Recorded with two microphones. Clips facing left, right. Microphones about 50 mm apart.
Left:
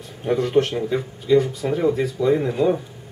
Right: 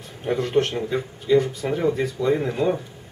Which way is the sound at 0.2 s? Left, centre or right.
Centre.